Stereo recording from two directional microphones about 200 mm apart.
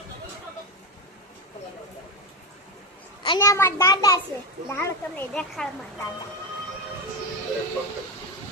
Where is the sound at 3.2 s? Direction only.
20° left (ahead or behind).